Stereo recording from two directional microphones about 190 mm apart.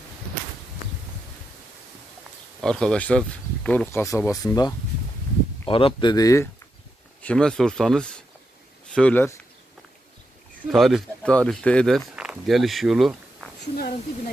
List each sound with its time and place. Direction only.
2.6 s speech: 5° left (ahead or behind)
7.2 s speech: 5° left (ahead or behind)
10.7 s speech: centre (ahead or behind)
13.7 s a woman's voice: 55° left (ahead or behind)